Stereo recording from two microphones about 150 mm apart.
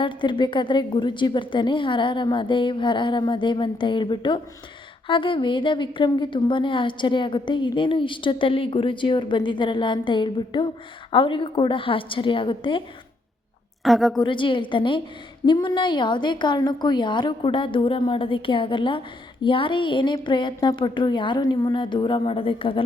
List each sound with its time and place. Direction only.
0.0 s a woman's voice: 35° left (ahead or behind)
13.8 s a woman's voice: centre (ahead or behind)
14.2 s a woman's voice: 35° left (ahead or behind)